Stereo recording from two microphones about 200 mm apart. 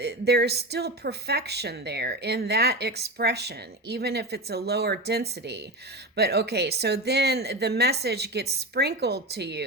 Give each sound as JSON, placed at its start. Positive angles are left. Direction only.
{"t": 0.0, "sound": "speech", "side_deg": -55}